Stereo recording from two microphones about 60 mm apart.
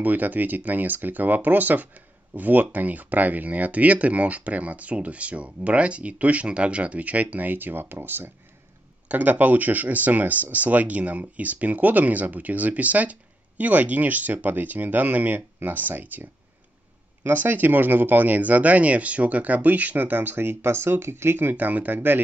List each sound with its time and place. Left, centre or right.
0.0 s speech: right